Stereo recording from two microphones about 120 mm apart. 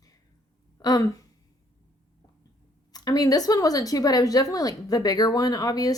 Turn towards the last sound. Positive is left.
turn(degrees=30)  # may be behind; listen again after turning